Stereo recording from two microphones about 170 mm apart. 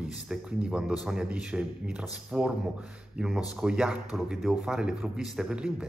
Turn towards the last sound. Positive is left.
turn(degrees=-5)  # may be behind; listen again after turning